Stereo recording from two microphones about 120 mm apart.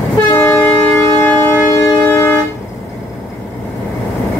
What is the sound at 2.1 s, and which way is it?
Vehicle, 20° left (ahead or behind).